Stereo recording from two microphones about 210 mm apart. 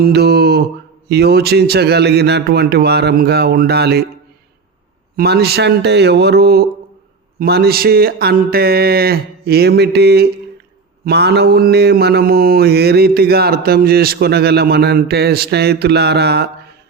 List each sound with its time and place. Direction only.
0.0 s mantra: 50° right (ahead or behind)
5.1 s mantra: 50° right (ahead or behind)